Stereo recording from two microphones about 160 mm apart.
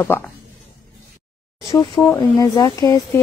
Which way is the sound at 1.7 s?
30° left (ahead or behind).